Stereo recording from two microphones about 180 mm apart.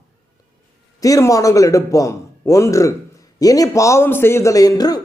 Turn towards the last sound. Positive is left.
turn(degrees=20)  # may be behind; listen again after turning